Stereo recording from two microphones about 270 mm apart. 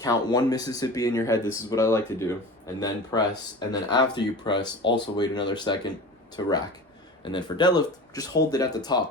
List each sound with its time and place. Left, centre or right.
0.0 s speech: centre